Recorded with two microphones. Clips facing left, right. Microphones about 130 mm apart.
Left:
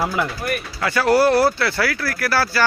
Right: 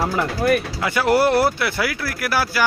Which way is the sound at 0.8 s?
20° right (ahead or behind).